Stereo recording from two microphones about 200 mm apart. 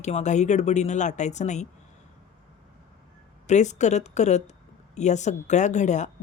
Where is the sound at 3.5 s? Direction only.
35° left (ahead or behind).